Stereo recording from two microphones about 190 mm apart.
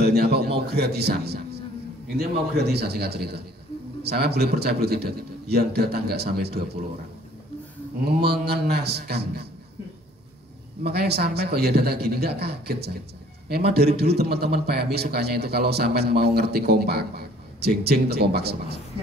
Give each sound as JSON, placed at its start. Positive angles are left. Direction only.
{"t": 0.0, "sound": "a sound", "side_deg": -55}
{"t": 2.5, "sound": "a man's voice", "side_deg": -60}
{"t": 8.0, "sound": "a man's voice", "side_deg": -55}
{"t": 10.8, "sound": "a man's voice", "side_deg": -60}